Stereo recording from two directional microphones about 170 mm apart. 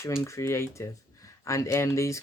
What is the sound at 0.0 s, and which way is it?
Speech, 15° left (ahead or behind).